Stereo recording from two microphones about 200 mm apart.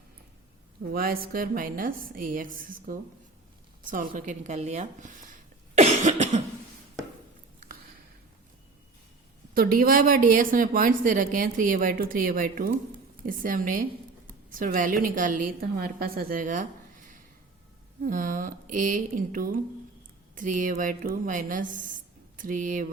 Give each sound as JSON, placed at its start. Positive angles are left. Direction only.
{"t": 0.9, "sound": "a woman's voice", "side_deg": -45}
{"t": 5.7, "sound": "cough", "side_deg": -35}
{"t": 9.6, "sound": "a woman's voice", "side_deg": -45}